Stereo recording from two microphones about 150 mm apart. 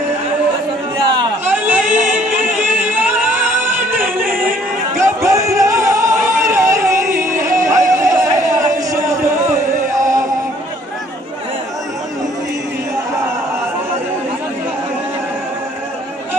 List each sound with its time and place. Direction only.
1.4 s chatter: 15° right (ahead or behind)
2.0 s music: 10° right (ahead or behind)
4.2 s music: 65° right (ahead or behind)
4.9 s a sound: 20° right (ahead or behind)